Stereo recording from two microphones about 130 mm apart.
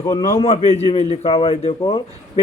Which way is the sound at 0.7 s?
55° left (ahead or behind).